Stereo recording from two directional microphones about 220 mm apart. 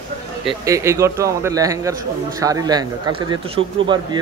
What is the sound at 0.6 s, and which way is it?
A man's voice, 15° right (ahead or behind).